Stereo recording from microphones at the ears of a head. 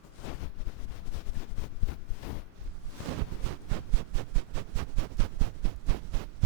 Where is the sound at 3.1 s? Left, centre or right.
Right.